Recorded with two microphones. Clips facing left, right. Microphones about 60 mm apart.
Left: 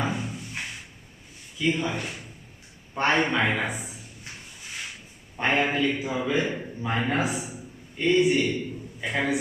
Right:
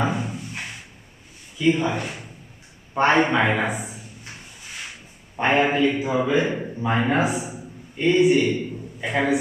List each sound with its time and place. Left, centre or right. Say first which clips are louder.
0.0 s a sound: right 5 dB; right
1.5 s a man's voice: right 5 dB; centre
2.0 s a man's voice: right 4 dB; right
5.4 s a man's voice: right 5 dB; centre